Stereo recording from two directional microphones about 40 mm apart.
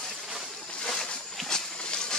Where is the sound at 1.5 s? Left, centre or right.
Centre.